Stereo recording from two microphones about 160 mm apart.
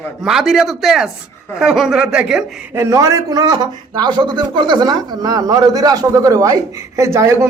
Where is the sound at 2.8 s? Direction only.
20° right (ahead or behind).